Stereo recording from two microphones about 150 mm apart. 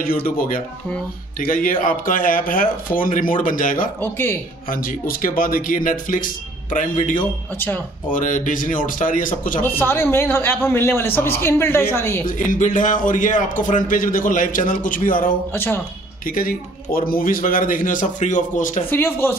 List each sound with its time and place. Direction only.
1.4 s a man's voice: 65° left (ahead or behind)
4.0 s speech: 15° left (ahead or behind)
4.6 s speech: 70° left (ahead or behind)
7.5 s speech: 15° left (ahead or behind)
8.1 s a man's voice: 60° left (ahead or behind)
9.6 s speech: 15° left (ahead or behind)
12.3 s a man's voice: 55° left (ahead or behind)
15.5 s speech: 15° left (ahead or behind)
16.3 s a man's voice: 70° left (ahead or behind)
18.9 s speech: 15° left (ahead or behind)